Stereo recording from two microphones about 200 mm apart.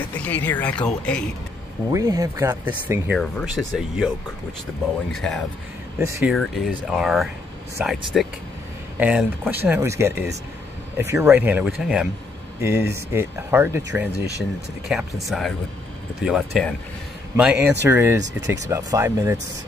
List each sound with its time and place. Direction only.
0.2 s speech: 10° left (ahead or behind)
1.9 s speech: 15° right (ahead or behind)
3.2 s speech: centre (ahead or behind)
5.1 s speech: centre (ahead or behind)
5.9 s speech: 15° right (ahead or behind)
6.3 s speech: 5° right (ahead or behind)
14.1 s speech: 55° right (ahead or behind)
14.9 s speech: centre (ahead or behind)